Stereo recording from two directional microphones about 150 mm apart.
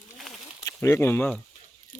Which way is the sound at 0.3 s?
5° left (ahead or behind).